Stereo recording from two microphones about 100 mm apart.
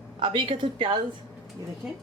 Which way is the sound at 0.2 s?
55° right (ahead or behind).